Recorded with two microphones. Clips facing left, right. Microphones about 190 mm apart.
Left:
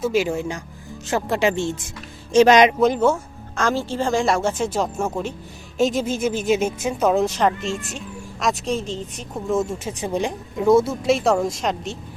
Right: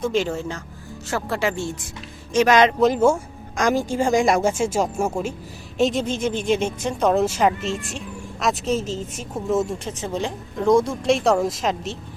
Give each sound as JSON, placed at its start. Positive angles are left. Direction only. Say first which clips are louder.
{"t": 0.0, "sound": "speech", "louder": "left 2 dB", "side_deg": 10}
{"t": 2.7, "sound": "speech", "louder": "even", "side_deg": 0}
{"t": 3.6, "sound": "a woman's voice", "louder": "right 2 dB", "side_deg": -15}
{"t": 5.7, "sound": "speech", "louder": "even", "side_deg": 0}